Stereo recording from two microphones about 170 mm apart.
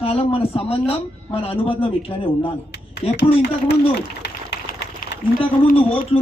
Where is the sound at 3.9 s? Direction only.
80° left.